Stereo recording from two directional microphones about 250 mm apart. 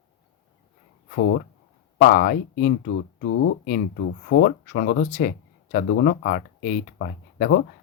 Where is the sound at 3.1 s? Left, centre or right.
Left.